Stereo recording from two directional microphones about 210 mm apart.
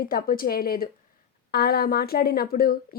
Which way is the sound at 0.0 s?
45° left (ahead or behind).